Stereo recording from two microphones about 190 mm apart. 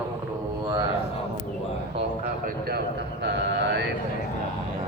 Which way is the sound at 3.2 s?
65° right (ahead or behind).